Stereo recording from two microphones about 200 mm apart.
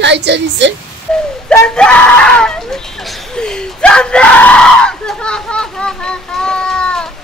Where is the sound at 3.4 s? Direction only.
5° left (ahead or behind).